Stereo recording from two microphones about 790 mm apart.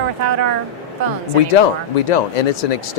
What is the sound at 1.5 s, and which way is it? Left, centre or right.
Speech, left.